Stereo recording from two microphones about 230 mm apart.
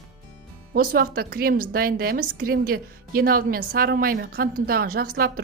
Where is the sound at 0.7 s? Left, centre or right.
Right.